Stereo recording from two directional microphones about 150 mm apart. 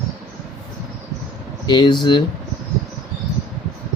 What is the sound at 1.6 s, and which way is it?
Speech, 30° left (ahead or behind).